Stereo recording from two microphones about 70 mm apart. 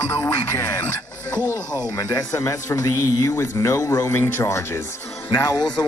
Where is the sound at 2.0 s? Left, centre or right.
Left.